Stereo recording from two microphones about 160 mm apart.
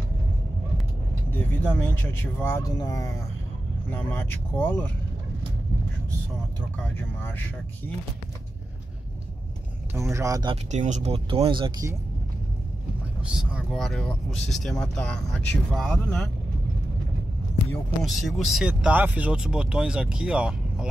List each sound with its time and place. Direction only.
1.3 s speech: 10° left (ahead or behind)
7.2 s speech: 15° left (ahead or behind)
9.9 s speech: 20° right (ahead or behind)
10.5 s speech: 45° right (ahead or behind)
13.3 s speech: 5° right (ahead or behind)
18.0 s speech: centre (ahead or behind)